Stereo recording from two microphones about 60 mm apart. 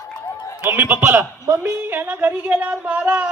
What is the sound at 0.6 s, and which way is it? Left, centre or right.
A man's voice, right.